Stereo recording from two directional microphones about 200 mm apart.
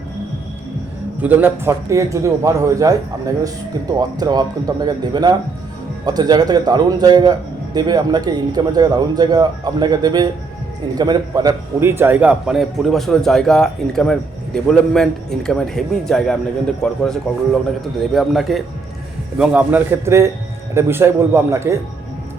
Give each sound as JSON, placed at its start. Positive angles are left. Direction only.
{"t": 1.2, "sound": "a man's voice", "side_deg": -10}